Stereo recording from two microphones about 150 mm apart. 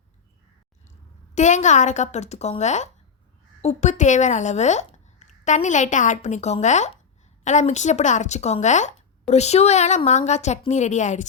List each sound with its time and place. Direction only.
1.4 s speech: 55° left (ahead or behind)